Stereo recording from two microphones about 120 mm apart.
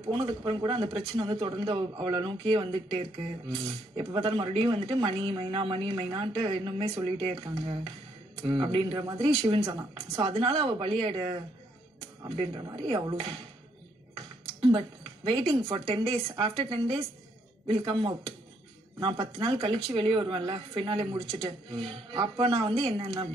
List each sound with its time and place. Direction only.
0.0 s speech: 45° right (ahead or behind)
8.9 s speech: 35° right (ahead or behind)
10.2 s speech: 45° right (ahead or behind)
12.5 s speech: 40° right (ahead or behind)
14.6 s speech: 45° right (ahead or behind)